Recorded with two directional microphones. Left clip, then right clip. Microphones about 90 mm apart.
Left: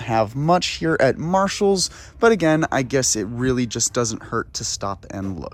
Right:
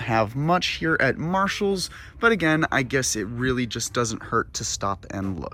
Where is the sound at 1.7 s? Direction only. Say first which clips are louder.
Left 6 dB; 75° left (ahead or behind).